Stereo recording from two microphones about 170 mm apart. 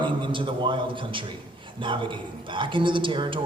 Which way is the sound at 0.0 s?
30° right (ahead or behind).